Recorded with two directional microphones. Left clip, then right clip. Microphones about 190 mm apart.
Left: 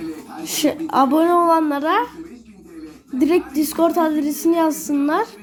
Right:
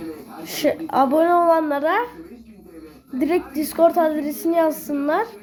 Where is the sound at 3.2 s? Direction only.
Centre (ahead or behind).